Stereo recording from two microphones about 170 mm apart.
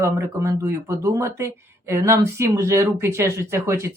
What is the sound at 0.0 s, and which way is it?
Speech, 15° right (ahead or behind).